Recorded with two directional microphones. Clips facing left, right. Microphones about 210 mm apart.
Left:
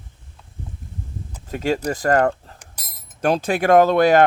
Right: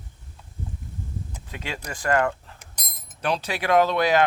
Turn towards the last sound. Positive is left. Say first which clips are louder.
# left 6 dB
turn(degrees=50)  # may be behind; listen again after turning